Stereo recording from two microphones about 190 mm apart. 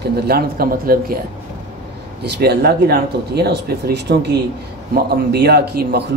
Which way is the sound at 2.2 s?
60° right (ahead or behind).